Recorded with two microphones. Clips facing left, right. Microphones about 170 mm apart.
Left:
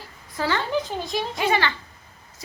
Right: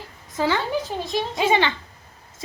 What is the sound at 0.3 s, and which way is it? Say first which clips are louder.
Speech: right 3 dB; 15° right (ahead or behind).